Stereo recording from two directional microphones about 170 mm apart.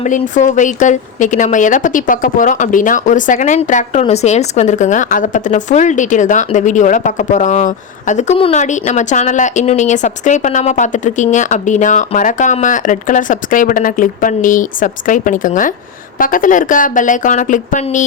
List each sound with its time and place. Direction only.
0.0 s a woman's voice: 45° left (ahead or behind)